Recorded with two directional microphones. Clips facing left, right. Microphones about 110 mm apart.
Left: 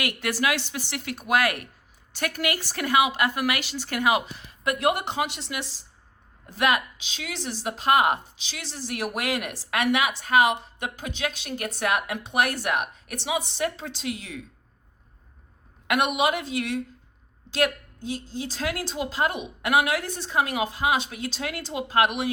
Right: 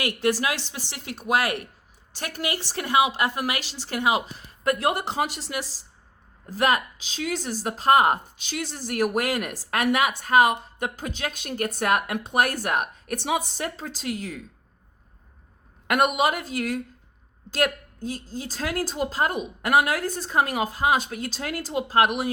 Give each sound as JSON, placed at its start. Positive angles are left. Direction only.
{"t": 0.0, "sound": "a woman's voice", "side_deg": -35}
{"t": 4.4, "sound": "speech", "side_deg": -40}
{"t": 15.9, "sound": "a woman's voice", "side_deg": -40}